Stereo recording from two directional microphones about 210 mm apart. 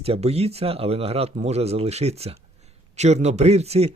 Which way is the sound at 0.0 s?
30° right (ahead or behind).